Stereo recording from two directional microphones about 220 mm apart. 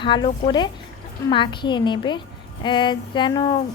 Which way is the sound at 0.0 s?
20° left (ahead or behind).